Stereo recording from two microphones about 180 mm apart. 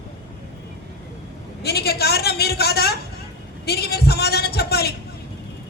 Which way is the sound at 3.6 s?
60° left (ahead or behind).